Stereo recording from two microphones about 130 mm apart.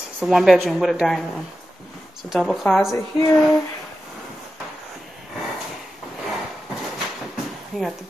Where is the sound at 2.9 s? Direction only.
25° left (ahead or behind).